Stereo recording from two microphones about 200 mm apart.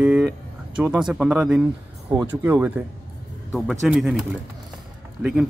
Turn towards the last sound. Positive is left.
turn(degrees=-5)  # may be behind; listen again after turning